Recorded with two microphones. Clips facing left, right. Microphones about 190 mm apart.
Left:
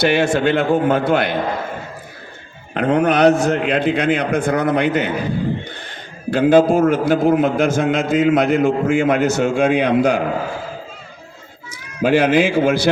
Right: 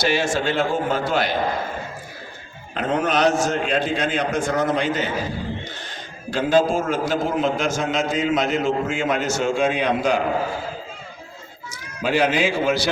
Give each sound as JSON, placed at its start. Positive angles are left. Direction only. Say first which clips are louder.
{"t": 0.0, "sound": "a man's voice", "louder": "left 6 dB", "side_deg": 60}
{"t": 2.7, "sound": "a man's voice", "louder": "left 6 dB", "side_deg": 60}
{"t": 6.3, "sound": "a man's voice", "louder": "left 6 dB", "side_deg": 55}
{"t": 11.7, "sound": "speech", "louder": "left 7 dB", "side_deg": 55}